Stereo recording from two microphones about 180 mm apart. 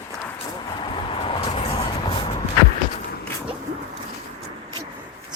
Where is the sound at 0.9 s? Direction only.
30° left (ahead or behind).